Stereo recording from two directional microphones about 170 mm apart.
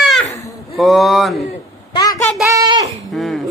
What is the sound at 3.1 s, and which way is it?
Cough, centre (ahead or behind).